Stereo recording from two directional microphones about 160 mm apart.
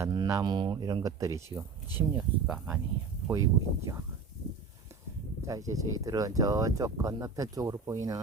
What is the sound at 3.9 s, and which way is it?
Speech, 20° right (ahead or behind).